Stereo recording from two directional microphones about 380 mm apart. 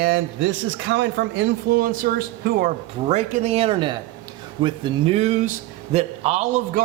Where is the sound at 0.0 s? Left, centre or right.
Right.